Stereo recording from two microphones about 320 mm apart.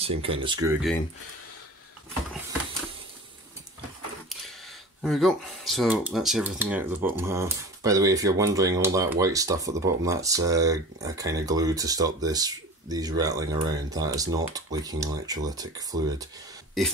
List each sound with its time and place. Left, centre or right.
0.0 s speech: centre
5.0 s speech: centre